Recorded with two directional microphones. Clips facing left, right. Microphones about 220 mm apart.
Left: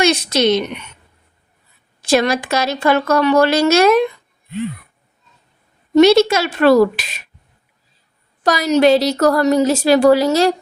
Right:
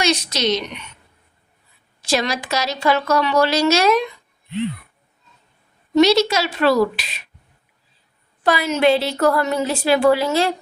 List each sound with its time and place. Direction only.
0.0 s a woman's voice: 55° left (ahead or behind)
2.0 s a woman's voice: 55° left (ahead or behind)
6.0 s a woman's voice: 55° left (ahead or behind)
8.4 s a woman's voice: 40° left (ahead or behind)